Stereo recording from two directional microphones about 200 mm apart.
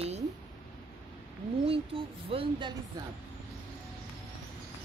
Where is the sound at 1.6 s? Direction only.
25° right (ahead or behind).